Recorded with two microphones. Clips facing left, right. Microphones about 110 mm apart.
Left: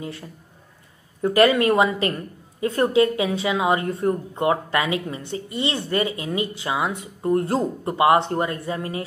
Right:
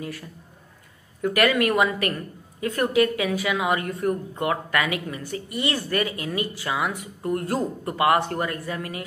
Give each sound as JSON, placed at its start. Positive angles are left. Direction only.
{"t": 0.0, "sound": "a woman's voice", "side_deg": 25}